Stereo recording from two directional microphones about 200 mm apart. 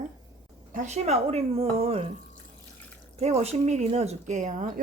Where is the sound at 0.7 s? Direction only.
35° right (ahead or behind).